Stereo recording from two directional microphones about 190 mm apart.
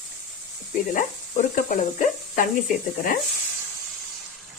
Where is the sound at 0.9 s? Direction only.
45° left (ahead or behind).